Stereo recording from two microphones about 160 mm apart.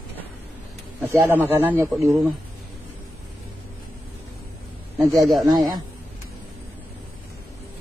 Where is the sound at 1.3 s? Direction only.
15° right (ahead or behind).